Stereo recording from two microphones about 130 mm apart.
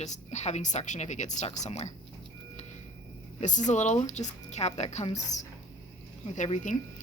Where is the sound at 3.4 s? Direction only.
70° left (ahead or behind).